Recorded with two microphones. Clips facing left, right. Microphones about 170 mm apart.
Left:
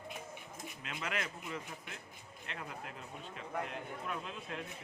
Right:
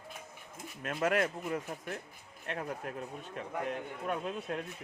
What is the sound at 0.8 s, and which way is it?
A man's voice, 50° right (ahead or behind).